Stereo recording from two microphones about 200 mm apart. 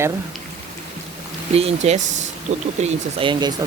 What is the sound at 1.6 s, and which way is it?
Speech, 30° right (ahead or behind).